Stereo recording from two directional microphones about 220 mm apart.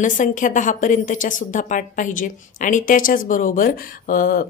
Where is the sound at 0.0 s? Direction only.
35° left (ahead or behind).